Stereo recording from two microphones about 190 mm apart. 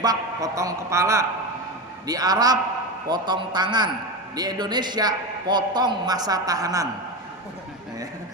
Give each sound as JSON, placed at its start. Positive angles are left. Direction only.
{"t": 0.0, "sound": "a woman's voice", "side_deg": -20}